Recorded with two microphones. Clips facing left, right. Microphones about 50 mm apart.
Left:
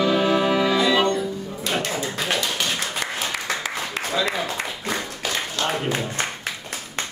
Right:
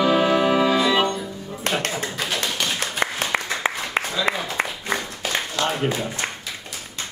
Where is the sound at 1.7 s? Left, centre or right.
Right.